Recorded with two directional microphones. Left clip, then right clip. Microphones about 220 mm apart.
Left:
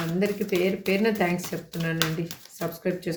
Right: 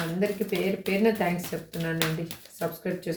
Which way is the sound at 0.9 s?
40° left (ahead or behind).